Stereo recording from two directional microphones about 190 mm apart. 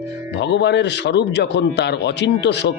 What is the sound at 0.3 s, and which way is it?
A man's voice, 65° left (ahead or behind).